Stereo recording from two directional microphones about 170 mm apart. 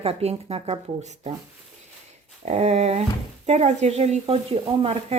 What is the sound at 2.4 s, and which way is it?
Speech, 40° right (ahead or behind).